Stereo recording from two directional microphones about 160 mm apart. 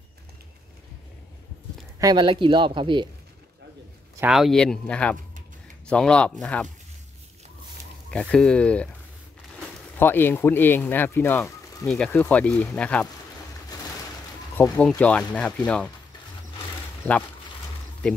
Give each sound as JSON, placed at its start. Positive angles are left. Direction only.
{"t": 2.0, "sound": "speech", "side_deg": -25}
{"t": 4.3, "sound": "speech", "side_deg": 0}
{"t": 8.1, "sound": "speech", "side_deg": 5}
{"t": 9.9, "sound": "speech", "side_deg": 15}
{"t": 14.6, "sound": "speech", "side_deg": 5}